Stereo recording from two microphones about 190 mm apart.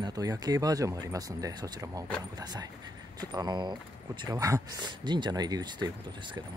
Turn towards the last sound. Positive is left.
turn(degrees=-25)  # may be behind; listen again after turning